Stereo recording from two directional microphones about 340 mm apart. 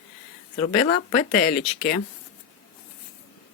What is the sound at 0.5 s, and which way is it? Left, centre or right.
Speech, centre.